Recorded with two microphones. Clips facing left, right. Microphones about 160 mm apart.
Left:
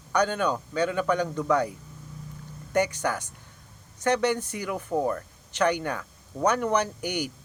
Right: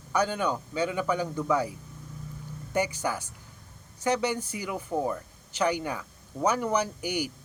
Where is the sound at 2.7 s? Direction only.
10° right (ahead or behind).